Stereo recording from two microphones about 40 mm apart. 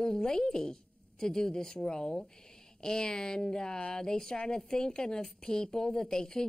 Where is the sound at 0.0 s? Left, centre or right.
Centre.